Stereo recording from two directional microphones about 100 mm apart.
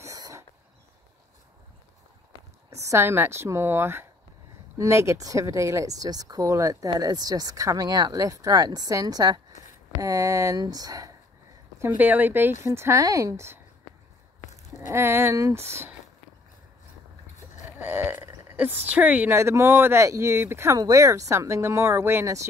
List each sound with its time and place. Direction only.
0.0 s a sound: 35° right (ahead or behind)
2.7 s speech: 30° right (ahead or behind)
11.8 s speech: 20° right (ahead or behind)
14.9 s speech: 25° right (ahead or behind)
17.6 s a sound: 20° right (ahead or behind)
19.3 s speech: 25° right (ahead or behind)
20.7 s speech: 35° right (ahead or behind)